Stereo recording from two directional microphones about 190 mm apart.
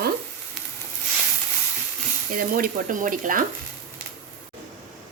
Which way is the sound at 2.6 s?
45° right (ahead or behind).